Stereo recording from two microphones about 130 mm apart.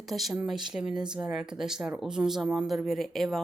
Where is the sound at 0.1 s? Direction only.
Centre (ahead or behind).